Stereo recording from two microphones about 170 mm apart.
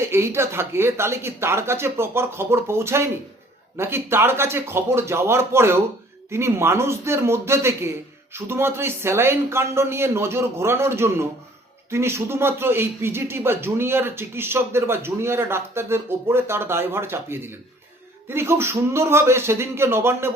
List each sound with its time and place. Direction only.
0.0 s speech: 15° right (ahead or behind)